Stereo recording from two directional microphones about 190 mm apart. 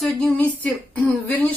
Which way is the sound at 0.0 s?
5° left (ahead or behind).